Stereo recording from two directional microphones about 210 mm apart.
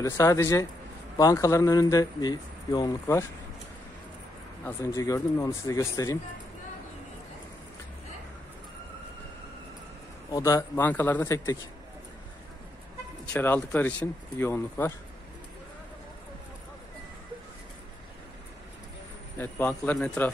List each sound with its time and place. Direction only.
0.0 s speech: 15° left (ahead or behind)
4.6 s speech: 15° left (ahead or behind)
10.3 s speech: 15° left (ahead or behind)
13.2 s speech: 10° left (ahead or behind)
19.3 s speech: 10° left (ahead or behind)